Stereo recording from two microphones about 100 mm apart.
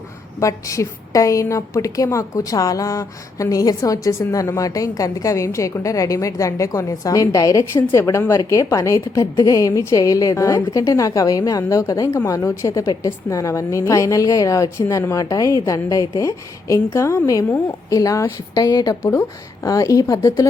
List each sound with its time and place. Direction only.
0.3 s a woman's voice: 30° left (ahead or behind)